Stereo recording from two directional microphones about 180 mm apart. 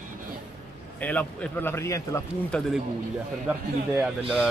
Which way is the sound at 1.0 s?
10° left (ahead or behind).